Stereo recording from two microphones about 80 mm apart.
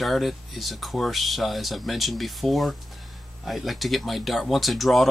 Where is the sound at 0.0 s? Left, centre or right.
Centre.